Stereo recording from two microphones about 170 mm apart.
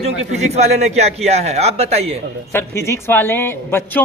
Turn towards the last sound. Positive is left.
turn(degrees=15)  # may be behind; listen again after turning